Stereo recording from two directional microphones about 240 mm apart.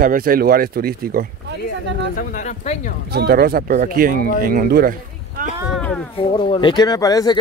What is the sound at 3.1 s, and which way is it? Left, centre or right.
Speech, right.